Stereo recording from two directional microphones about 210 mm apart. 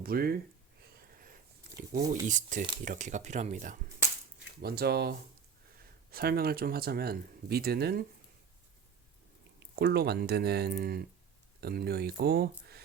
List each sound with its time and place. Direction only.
0.0 s a sound: 45° right (ahead or behind)
2.2 s speech: 35° right (ahead or behind)
9.7 s speech: 50° right (ahead or behind)